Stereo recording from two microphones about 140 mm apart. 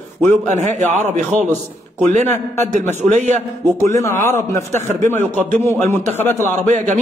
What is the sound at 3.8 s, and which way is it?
Speech, 20° left (ahead or behind).